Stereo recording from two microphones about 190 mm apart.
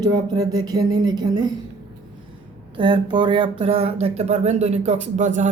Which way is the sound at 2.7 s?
25° right (ahead or behind).